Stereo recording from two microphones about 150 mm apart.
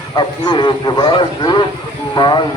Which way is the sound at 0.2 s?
30° left (ahead or behind).